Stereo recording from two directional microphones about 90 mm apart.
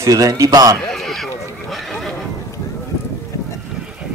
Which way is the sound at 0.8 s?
5° left (ahead or behind).